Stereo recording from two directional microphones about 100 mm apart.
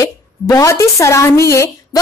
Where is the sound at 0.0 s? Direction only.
35° left (ahead or behind).